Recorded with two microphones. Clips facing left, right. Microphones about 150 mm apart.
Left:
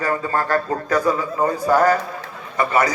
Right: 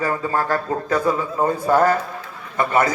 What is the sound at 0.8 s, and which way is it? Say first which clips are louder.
A man's voice: right 1 dB; 25° right (ahead or behind).